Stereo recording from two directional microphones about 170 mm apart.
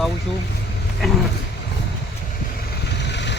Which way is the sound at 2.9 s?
90° left.